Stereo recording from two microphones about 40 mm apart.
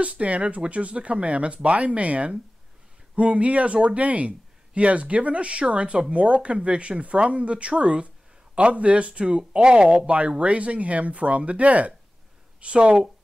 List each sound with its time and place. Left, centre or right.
0.0 s speech: right